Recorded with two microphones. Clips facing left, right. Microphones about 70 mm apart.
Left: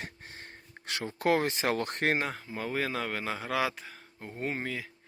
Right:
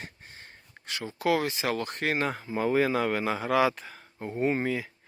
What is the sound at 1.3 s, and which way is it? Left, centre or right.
Speech, left.